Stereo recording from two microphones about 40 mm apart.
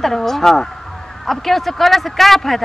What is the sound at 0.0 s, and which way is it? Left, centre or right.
A man's voice, centre.